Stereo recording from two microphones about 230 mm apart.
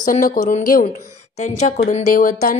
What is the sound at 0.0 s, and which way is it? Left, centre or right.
Speech, left.